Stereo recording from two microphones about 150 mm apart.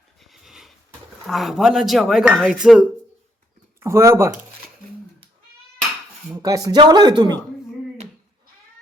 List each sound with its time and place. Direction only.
0.2 s a sound: centre (ahead or behind)
1.3 s speech: centre (ahead or behind)
3.8 s speech: 20° right (ahead or behind)
6.3 s speech: 25° right (ahead or behind)